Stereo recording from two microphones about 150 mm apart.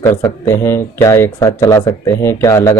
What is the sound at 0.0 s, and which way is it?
Speech, 20° left (ahead or behind).